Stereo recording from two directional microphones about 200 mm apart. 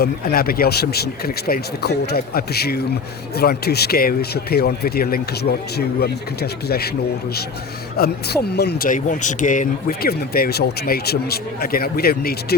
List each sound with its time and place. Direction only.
0.0 s speech: 50° left (ahead or behind)
7.9 s speech: 50° left (ahead or behind)